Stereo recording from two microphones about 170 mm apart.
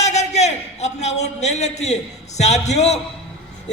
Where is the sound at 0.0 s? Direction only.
40° left (ahead or behind).